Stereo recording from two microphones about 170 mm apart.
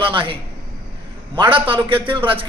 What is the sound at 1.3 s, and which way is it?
Speech, 30° right (ahead or behind).